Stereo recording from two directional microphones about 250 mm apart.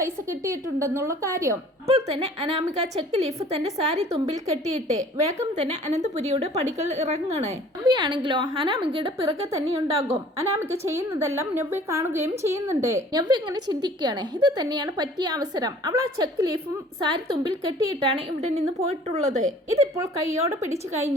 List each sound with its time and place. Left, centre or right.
0.0 s a woman's voice: centre
1.9 s a woman's voice: right
20.5 s a woman's voice: centre